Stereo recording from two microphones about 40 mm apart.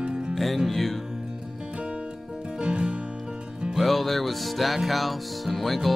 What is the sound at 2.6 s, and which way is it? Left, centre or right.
Music, right.